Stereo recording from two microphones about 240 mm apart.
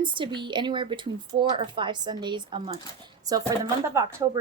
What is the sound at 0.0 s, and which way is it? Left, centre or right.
A woman's voice, centre.